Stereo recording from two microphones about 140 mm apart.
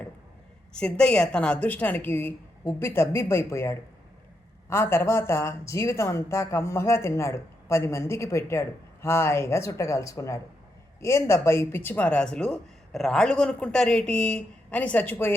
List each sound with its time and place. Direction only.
0.7 s speech: 5° left (ahead or behind)